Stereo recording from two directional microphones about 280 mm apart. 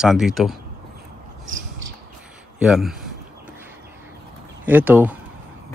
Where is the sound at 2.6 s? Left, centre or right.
Centre.